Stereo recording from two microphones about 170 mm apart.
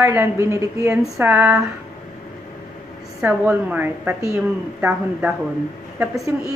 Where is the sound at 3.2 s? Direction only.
10° right (ahead or behind).